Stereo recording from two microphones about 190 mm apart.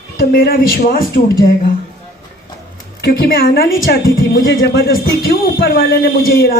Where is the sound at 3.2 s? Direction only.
50° left (ahead or behind).